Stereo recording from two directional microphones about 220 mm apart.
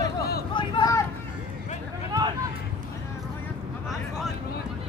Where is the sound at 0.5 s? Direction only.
20° left (ahead or behind).